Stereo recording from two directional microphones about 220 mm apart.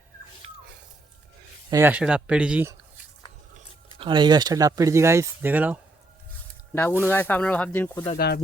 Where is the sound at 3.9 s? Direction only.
20° right (ahead or behind).